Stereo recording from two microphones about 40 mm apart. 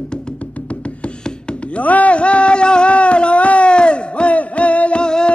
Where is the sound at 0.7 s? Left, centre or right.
Left.